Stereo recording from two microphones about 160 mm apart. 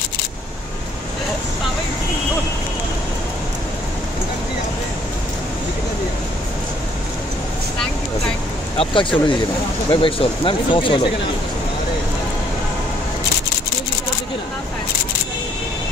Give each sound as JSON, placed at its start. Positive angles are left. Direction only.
{"t": 8.7, "sound": "speech", "side_deg": 30}